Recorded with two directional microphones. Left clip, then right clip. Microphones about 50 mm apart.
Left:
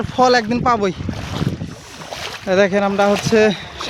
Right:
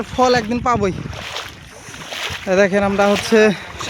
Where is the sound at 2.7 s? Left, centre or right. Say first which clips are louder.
Even; right.